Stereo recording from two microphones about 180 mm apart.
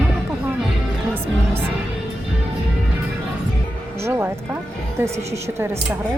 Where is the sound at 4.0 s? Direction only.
10° right (ahead or behind).